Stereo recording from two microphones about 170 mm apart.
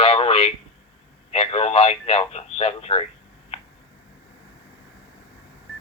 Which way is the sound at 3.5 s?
35° left (ahead or behind).